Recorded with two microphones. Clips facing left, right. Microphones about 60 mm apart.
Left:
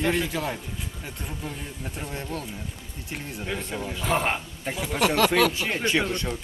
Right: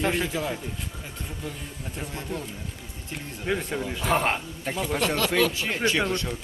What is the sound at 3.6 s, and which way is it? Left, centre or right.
Speech, centre.